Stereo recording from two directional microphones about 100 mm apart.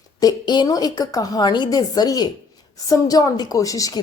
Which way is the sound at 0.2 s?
45° left (ahead or behind).